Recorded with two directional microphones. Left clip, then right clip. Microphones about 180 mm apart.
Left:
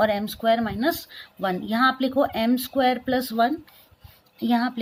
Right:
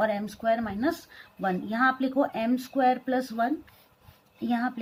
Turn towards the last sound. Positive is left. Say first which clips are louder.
# left 5 dB
turn(degrees=40)  # may be behind; listen again after turning